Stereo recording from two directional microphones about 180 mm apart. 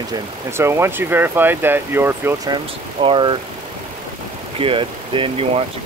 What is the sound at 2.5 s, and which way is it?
Speech, 30° right (ahead or behind).